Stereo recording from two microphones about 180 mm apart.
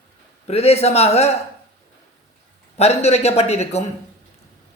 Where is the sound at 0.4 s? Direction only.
35° left (ahead or behind).